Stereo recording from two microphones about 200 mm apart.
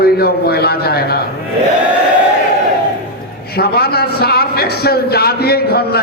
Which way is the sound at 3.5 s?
50° left (ahead or behind).